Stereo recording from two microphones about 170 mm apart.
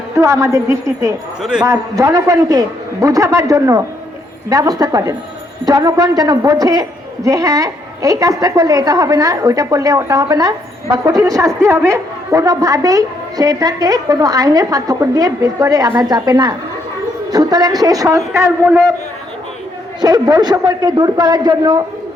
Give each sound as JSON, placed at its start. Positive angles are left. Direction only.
{"t": 0.2, "sound": "a woman's voice", "side_deg": -20}
{"t": 1.4, "sound": "a man's voice", "side_deg": -5}
{"t": 1.6, "sound": "a woman's voice", "side_deg": -20}
{"t": 20.0, "sound": "a woman's voice", "side_deg": -25}